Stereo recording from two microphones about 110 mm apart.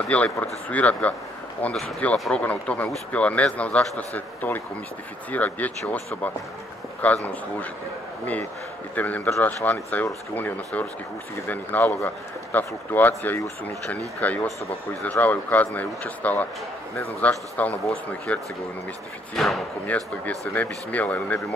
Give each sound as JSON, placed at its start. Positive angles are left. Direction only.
{"t": 0.1, "sound": "speech", "side_deg": 15}
{"t": 2.4, "sound": "speech", "side_deg": 10}
{"t": 8.9, "sound": "speech", "side_deg": 15}
{"t": 19.9, "sound": "speech", "side_deg": 15}